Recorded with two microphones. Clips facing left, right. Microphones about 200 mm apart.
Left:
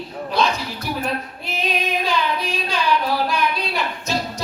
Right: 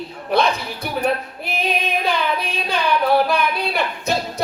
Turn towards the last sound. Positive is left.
turn(degrees=-55)  # may be behind; listen again after turning